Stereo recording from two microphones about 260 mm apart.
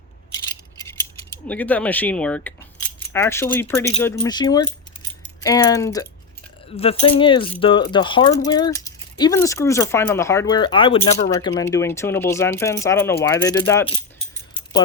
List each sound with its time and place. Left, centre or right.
0.3 s rattle: centre
1.3 s speech: centre